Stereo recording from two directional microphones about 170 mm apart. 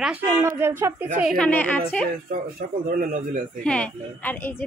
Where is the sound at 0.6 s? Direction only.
15° right (ahead or behind).